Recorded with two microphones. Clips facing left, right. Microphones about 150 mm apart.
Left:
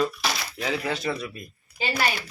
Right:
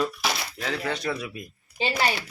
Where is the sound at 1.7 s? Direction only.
25° right (ahead or behind).